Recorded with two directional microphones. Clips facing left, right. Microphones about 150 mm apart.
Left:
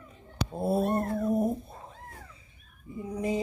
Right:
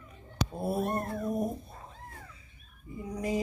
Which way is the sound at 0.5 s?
25° left (ahead or behind).